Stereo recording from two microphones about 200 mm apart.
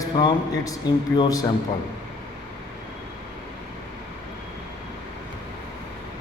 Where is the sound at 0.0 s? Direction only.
20° left (ahead or behind).